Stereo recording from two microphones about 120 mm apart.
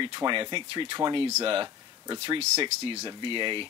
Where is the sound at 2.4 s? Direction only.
55° right (ahead or behind).